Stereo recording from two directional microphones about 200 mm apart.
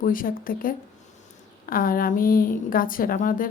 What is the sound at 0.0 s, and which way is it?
A woman's voice, 45° left (ahead or behind).